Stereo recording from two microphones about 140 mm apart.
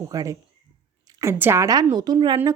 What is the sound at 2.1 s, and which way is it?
Speech, 40° right (ahead or behind).